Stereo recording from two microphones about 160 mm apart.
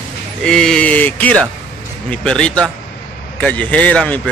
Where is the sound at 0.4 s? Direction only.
5° left (ahead or behind).